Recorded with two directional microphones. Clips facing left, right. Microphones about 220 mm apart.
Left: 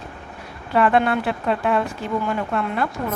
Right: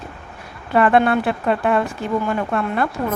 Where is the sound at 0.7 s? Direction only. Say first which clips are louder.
Right 3 dB; 55° right (ahead or behind).